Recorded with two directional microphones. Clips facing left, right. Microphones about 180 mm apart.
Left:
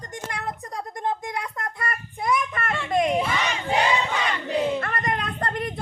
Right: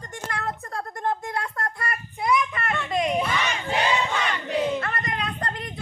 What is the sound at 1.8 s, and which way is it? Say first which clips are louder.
Child singing: even; 45° left (ahead or behind).